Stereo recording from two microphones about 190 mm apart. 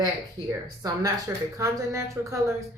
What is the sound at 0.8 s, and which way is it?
A woman's voice, 20° right (ahead or behind).